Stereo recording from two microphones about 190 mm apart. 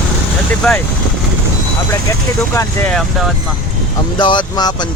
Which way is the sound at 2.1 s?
15° left (ahead or behind).